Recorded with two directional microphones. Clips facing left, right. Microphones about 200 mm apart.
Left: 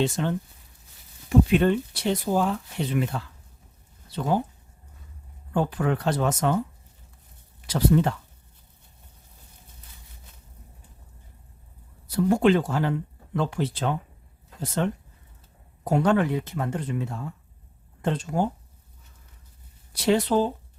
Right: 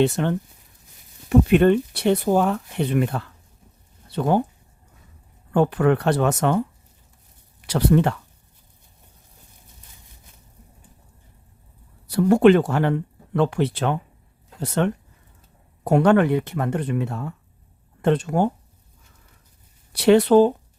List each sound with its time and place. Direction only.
0.0 s speech: 60° right (ahead or behind)
5.5 s speech: 65° right (ahead or behind)
7.7 s speech: 70° right (ahead or behind)
12.0 s speech: 65° right (ahead or behind)
19.9 s speech: 65° right (ahead or behind)